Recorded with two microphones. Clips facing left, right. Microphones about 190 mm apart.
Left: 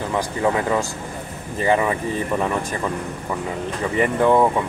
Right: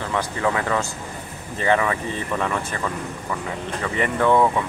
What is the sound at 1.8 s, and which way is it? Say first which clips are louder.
Speech: left 3 dB; 20° left (ahead or behind).